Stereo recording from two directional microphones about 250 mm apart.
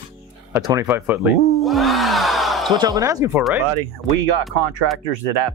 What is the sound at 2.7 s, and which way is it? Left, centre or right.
Speech, centre.